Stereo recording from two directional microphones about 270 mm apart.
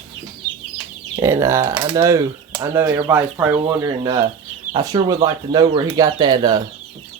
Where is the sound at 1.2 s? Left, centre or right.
Centre.